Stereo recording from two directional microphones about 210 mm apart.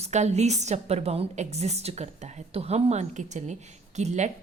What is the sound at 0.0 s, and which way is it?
A woman's voice, 35° right (ahead or behind).